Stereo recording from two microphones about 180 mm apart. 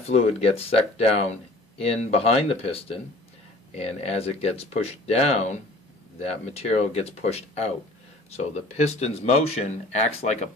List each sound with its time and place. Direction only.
0.0 s speech: 35° left (ahead or behind)